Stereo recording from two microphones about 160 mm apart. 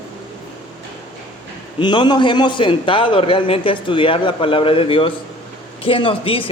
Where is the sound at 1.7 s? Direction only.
30° left (ahead or behind).